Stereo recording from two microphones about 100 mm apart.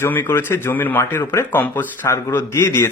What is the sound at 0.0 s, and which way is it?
Speech, 20° left (ahead or behind).